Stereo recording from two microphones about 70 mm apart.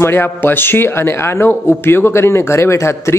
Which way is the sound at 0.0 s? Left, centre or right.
Left.